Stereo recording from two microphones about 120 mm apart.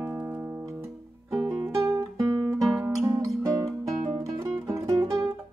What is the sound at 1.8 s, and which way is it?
Guitar, 25° right (ahead or behind).